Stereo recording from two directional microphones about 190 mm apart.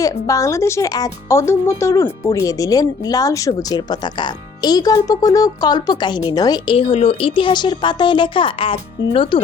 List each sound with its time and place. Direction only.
0.0 s speech: 15° left (ahead or behind)